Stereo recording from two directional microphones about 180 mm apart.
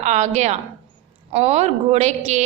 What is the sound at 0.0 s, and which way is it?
A woman's voice, 40° right (ahead or behind).